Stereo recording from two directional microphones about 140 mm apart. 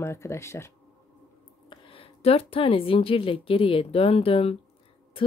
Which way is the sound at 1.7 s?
40° left (ahead or behind).